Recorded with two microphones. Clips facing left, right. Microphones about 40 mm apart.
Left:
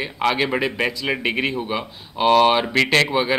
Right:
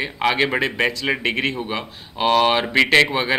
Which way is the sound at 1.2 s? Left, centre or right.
Centre.